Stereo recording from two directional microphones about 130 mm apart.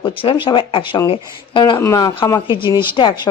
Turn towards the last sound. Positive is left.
turn(degrees=40)  # may be behind; listen again after turning